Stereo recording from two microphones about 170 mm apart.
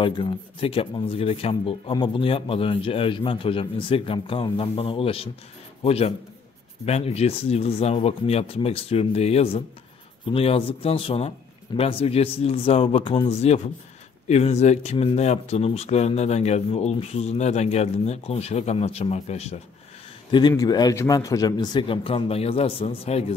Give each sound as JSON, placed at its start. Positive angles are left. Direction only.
{"t": 0.0, "sound": "speech", "side_deg": 35}
{"t": 20.2, "sound": "a man's voice", "side_deg": 25}